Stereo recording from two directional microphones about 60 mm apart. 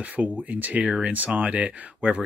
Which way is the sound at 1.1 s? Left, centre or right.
Right.